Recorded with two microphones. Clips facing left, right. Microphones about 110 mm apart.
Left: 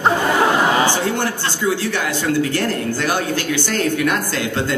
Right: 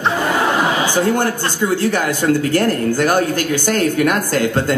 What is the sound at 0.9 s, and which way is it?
Speech, 45° right (ahead or behind).